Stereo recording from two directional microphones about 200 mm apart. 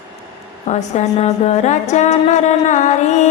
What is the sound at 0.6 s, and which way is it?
Music, 35° left (ahead or behind).